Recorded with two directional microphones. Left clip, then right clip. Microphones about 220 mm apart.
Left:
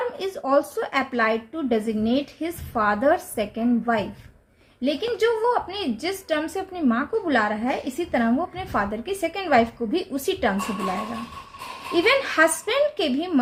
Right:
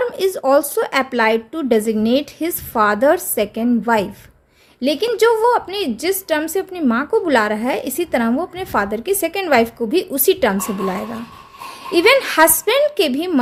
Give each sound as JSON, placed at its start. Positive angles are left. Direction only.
{"t": 0.2, "sound": "a woman's voice", "side_deg": -50}
{"t": 11.9, "sound": "a woman's voice", "side_deg": -50}